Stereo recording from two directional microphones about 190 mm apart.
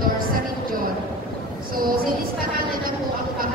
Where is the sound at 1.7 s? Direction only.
50° right (ahead or behind).